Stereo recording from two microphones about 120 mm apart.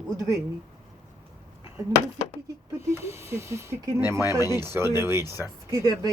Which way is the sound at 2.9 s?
20° right (ahead or behind).